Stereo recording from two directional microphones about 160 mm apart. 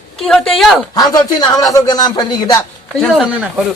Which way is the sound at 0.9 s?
25° left (ahead or behind).